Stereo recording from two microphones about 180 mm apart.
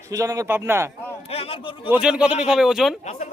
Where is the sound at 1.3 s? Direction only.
30° left (ahead or behind).